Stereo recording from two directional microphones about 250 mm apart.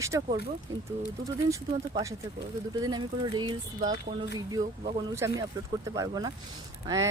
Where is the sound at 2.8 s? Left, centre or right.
Centre.